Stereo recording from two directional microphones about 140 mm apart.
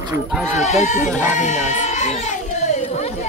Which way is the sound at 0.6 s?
60° left (ahead or behind).